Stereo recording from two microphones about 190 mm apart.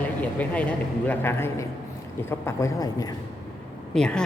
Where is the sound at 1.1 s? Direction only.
10° left (ahead or behind).